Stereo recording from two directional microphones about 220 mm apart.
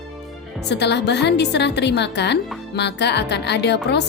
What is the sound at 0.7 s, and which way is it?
A woman's voice, 50° left (ahead or behind).